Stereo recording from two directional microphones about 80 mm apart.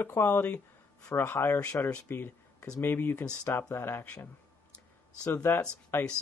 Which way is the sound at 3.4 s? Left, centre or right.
Left.